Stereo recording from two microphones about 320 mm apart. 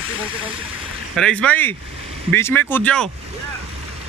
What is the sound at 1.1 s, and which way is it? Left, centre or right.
A man's voice, centre.